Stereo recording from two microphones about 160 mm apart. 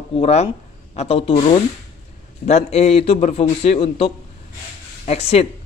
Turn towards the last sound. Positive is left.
turn(degrees=40)  # may be behind; listen again after turning